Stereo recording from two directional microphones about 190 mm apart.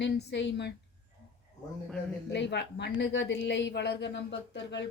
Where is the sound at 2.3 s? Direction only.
65° left (ahead or behind).